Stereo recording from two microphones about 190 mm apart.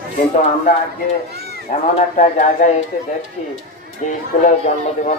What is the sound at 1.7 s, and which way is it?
Speech, 40° left (ahead or behind).